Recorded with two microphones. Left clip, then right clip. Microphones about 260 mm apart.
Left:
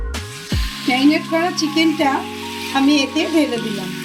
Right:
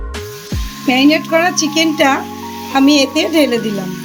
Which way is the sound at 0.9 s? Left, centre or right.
Right.